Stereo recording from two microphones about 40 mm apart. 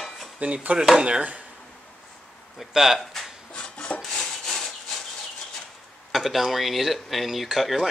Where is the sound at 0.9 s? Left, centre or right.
Right.